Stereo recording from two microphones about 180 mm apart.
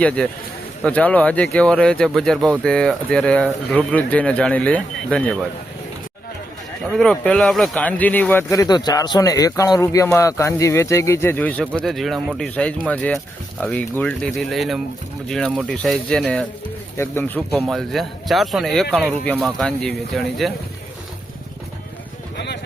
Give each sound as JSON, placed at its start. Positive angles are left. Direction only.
{"t": 0.9, "sound": "a man's voice", "side_deg": 10}
{"t": 6.9, "sound": "a man's voice", "side_deg": 5}